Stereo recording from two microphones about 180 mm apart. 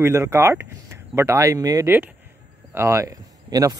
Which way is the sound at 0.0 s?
15° right (ahead or behind).